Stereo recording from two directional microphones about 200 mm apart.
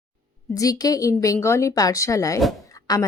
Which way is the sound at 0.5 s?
15° left (ahead or behind).